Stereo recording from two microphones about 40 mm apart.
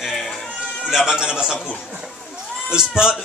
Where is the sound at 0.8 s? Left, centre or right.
Centre.